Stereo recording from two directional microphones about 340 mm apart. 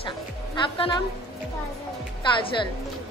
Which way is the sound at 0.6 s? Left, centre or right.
Centre.